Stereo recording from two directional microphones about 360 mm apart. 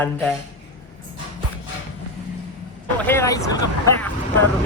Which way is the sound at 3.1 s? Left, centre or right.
Centre.